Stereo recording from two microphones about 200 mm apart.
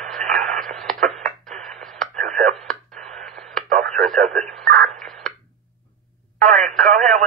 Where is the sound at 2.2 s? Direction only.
40° right (ahead or behind).